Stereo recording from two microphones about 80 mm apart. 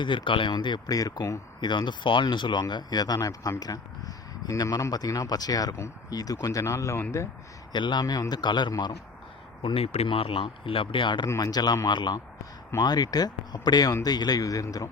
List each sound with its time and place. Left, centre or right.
0.0 s speech: left
0.9 s speech: left
1.6 s speech: left
3.2 s speech: left
7.7 s speech: left
9.6 s speech: left
11.3 s speech: left
11.9 s speech: left
12.8 s speech: left